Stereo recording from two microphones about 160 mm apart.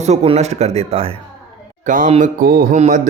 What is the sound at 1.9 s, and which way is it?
Speech, 50° right (ahead or behind).